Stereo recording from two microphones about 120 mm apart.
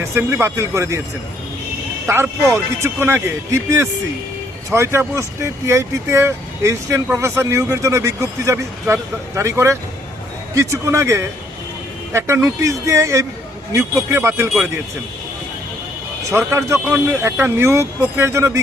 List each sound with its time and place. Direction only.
0.0 s speech: 20° right (ahead or behind)
2.0 s speech: 20° right (ahead or behind)
16.3 s speech: 20° right (ahead or behind)